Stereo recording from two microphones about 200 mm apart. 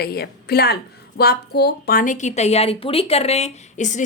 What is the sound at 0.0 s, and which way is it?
Speech, 50° left (ahead or behind).